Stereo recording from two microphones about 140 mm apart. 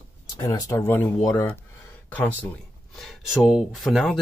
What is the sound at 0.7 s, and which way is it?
A man's voice, 15° left (ahead or behind).